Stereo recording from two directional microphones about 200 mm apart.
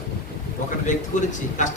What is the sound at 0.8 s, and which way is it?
Speech, 40° left (ahead or behind).